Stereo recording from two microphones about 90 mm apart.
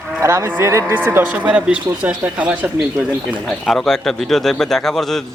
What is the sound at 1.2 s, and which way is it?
Speech, 15° right (ahead or behind).